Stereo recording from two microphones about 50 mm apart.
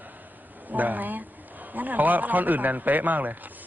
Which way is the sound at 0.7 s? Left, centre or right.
Right.